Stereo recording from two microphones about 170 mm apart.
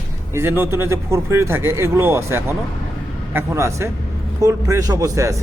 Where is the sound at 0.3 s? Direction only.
15° right (ahead or behind).